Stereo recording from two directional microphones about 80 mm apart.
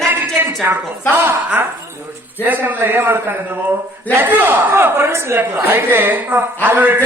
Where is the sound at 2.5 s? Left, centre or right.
Right.